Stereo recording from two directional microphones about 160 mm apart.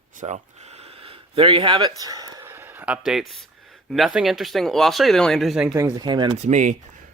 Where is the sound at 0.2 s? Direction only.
45° right (ahead or behind); by 2.5 s 25° right (ahead or behind).